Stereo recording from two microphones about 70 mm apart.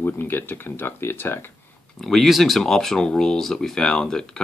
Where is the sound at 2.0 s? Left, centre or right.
Centre.